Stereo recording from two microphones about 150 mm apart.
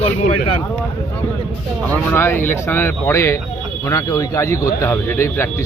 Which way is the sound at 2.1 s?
15° left (ahead or behind).